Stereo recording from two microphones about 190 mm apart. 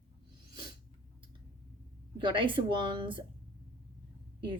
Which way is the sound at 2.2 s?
25° right (ahead or behind).